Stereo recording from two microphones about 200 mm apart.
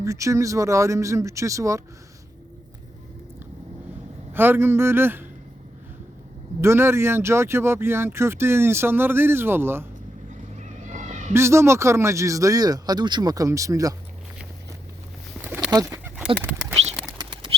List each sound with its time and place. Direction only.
0.0 s speech: 15° right (ahead or behind)
4.3 s speech: 10° right (ahead or behind)
6.6 s speech: 15° right (ahead or behind)
10.6 s vehicle: 40° right (ahead or behind)
11.3 s speech: 15° right (ahead or behind)
15.4 s fowl: 10° right (ahead or behind)
16.1 s a sound: 5° right (ahead or behind)
17.1 s bird flight: 20° right (ahead or behind)